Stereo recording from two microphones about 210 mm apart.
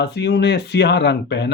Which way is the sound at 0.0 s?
55° left (ahead or behind).